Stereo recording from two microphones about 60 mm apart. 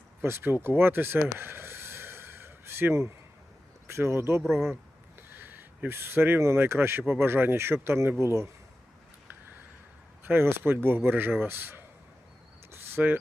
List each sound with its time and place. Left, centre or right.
0.2 s a sound: right
3.8 s speech: right
10.2 s speech: right
12.7 s cricket: right